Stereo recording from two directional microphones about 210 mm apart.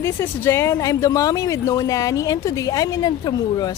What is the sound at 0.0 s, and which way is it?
Speech, 10° left (ahead or behind).